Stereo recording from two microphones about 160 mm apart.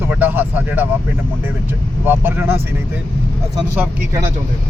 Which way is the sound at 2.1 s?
15° right (ahead or behind).